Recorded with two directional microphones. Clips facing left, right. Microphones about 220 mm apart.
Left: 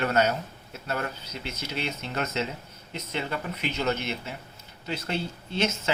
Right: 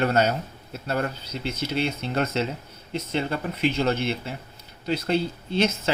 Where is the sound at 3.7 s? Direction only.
30° right (ahead or behind).